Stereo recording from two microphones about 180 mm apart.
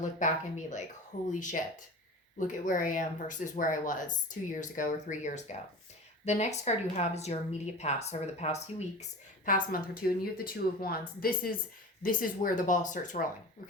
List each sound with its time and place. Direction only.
0.0 s speech: 45° left (ahead or behind)
9.5 s a woman's voice: 55° left (ahead or behind)